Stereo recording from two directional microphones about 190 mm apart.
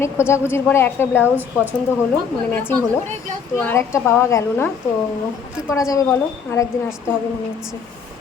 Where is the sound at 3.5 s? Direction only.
10° left (ahead or behind).